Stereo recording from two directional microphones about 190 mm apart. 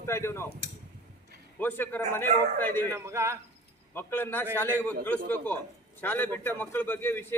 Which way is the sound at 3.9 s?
10° left (ahead or behind).